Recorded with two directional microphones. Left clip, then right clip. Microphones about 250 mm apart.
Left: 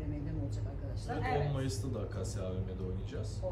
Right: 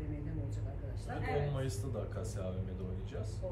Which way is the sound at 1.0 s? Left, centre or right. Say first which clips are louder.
Left 3 dB; centre.